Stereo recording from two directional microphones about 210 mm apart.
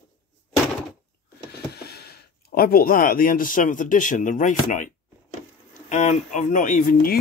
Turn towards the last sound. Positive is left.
turn(degrees=40)  # may be behind; listen again after turning